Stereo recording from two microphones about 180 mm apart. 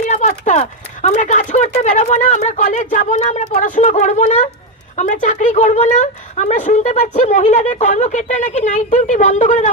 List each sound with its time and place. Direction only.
0.0 s speech: 40° left (ahead or behind)